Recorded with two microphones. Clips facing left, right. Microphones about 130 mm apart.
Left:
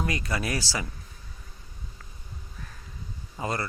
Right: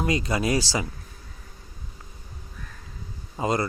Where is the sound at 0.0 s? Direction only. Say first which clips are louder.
Right 5 dB; 20° right (ahead or behind).